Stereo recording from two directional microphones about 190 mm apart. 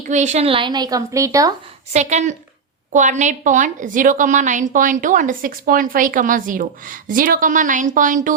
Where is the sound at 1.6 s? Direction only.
35° right (ahead or behind).